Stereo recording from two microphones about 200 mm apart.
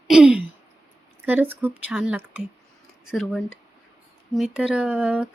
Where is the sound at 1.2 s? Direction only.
10° right (ahead or behind).